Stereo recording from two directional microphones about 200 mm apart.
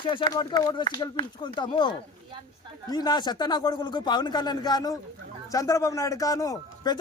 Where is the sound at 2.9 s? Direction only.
20° left (ahead or behind).